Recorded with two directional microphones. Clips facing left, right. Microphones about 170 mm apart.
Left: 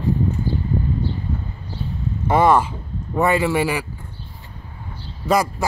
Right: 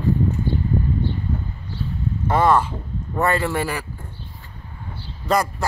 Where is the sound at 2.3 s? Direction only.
10° left (ahead or behind).